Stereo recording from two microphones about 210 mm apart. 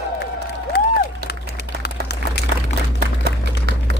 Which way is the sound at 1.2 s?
50° right (ahead or behind).